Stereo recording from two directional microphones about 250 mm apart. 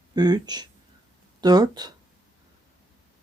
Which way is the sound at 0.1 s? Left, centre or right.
Centre.